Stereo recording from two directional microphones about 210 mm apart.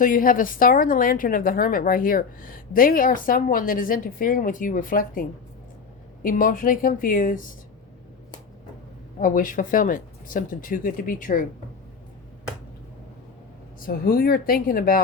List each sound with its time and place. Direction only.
0.0 s a woman's voice: 40° left (ahead or behind)
6.2 s a woman's voice: 40° left (ahead or behind)
9.2 s a woman's voice: 40° left (ahead or behind)
13.7 s speech: 45° left (ahead or behind)